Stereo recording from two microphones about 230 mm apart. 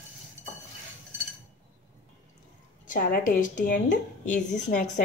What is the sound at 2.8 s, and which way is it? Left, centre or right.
A woman's voice, left.